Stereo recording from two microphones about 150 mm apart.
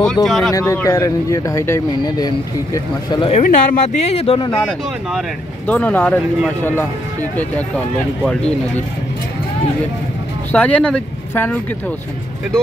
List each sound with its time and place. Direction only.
0.0 s speech: centre (ahead or behind)
0.5 s speech: 25° left (ahead or behind)
3.4 s speech: 60° left (ahead or behind); by 4.5 s 40° left (ahead or behind)
5.7 s speech: 10° left (ahead or behind)
10.5 s speech: 10° left (ahead or behind)